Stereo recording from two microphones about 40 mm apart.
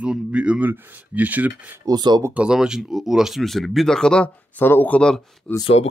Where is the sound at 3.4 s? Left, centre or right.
Centre.